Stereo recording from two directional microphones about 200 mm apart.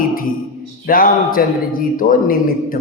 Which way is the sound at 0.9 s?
45° left (ahead or behind).